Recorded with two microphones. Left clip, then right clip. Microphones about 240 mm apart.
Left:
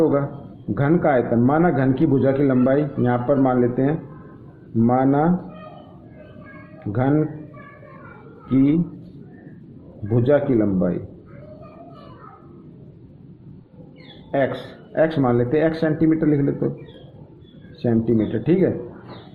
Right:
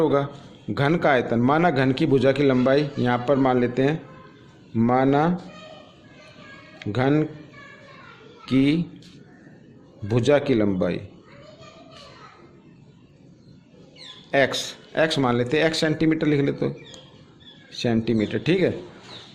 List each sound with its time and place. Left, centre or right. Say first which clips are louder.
0.0 s a man's voice: left 2 dB; right
6.9 s a man's voice: left 1 dB; right
8.4 s a man's voice: left 2 dB; right
10.2 s a man's voice: left 2 dB; right
14.3 s a man's voice: right 1 dB; right
17.7 s a man's voice: left 3 dB; right